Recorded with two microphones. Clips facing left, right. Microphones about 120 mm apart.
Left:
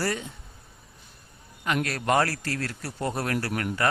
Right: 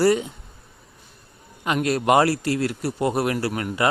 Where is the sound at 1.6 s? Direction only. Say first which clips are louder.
Right 6 dB; 20° right (ahead or behind).